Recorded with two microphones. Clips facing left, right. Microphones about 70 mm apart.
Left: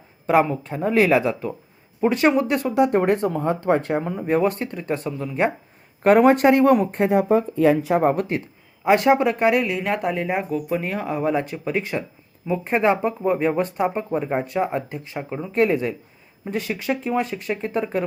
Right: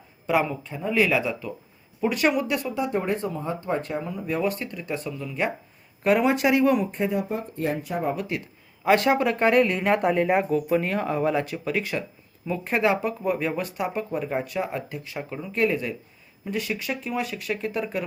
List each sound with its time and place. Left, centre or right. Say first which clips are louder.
0.3 s speech: left 5 dB; left
2.0 s speech: left 5 dB; left
2.7 s speech: left 11 dB; left
7.7 s speech: left 8 dB; left
8.1 s speech: left 6 dB; left
8.8 s speech: left 4 dB; left
15.2 s speech: left 5 dB; centre
15.5 s speech: left 5 dB; left